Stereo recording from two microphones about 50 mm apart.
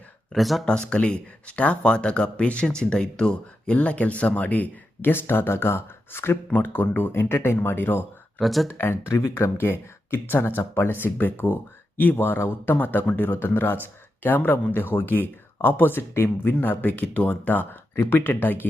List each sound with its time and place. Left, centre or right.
0.3 s speech: centre
0.6 s speech: centre
3.8 s speech: left
5.1 s speech: left
6.6 s speech: left
8.4 s speech: centre
9.0 s speech: left
9.6 s speech: left
18.0 s speech: left